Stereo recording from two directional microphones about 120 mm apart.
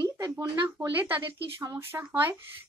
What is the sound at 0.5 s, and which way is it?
Speech, 15° right (ahead or behind).